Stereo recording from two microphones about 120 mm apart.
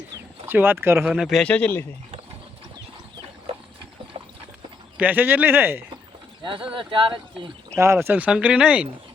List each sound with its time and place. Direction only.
0.4 s speech: 15° right (ahead or behind)
1.0 s speech: 5° right (ahead or behind)
1.5 s speech: 10° left (ahead or behind)
4.9 s speech: 15° right (ahead or behind)
6.7 s speech: 45° right (ahead or behind)
7.8 s speech: 20° right (ahead or behind)